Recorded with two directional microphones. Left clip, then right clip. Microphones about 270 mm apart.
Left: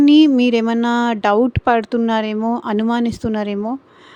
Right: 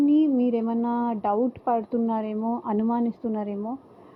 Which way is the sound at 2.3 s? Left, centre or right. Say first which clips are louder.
Left 8 dB; left.